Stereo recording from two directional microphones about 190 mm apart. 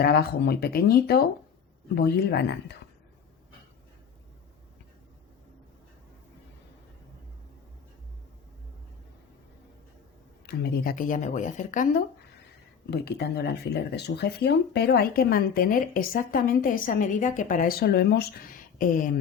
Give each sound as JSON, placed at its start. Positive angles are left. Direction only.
{"t": 0.0, "sound": "speech", "side_deg": 55}
{"t": 10.4, "sound": "speech", "side_deg": 55}
{"t": 12.9, "sound": "speech", "side_deg": 60}